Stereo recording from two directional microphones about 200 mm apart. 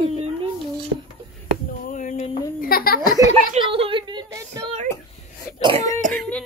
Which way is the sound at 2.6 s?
50° left (ahead or behind).